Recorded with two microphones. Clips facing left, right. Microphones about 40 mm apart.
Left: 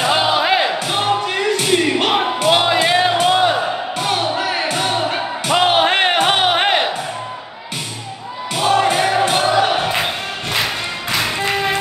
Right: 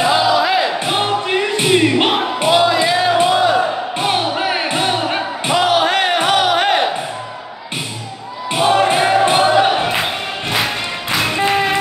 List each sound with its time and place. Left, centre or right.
0.1 s music: left
0.7 s music: right
2.5 s music: left
4.0 s music: right
5.5 s music: left
8.5 s music: right